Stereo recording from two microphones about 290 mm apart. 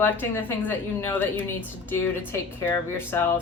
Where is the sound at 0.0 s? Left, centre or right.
Centre.